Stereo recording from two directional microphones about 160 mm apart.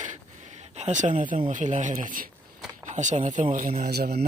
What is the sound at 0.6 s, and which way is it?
A man's voice, 45° right (ahead or behind).